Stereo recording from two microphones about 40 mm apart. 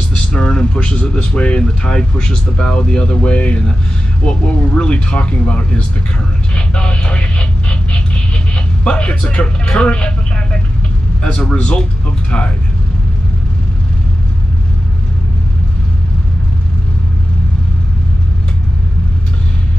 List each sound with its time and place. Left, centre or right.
0.1 s vehicle: left
0.5 s speech: left
6.5 s radio: left
8.5 s speech: left
11.6 s speech: left